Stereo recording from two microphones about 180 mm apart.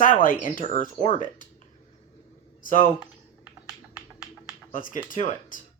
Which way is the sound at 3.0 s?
5° right (ahead or behind).